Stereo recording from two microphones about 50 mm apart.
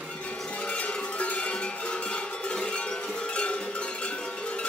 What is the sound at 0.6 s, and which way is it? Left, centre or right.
Cowbell, left.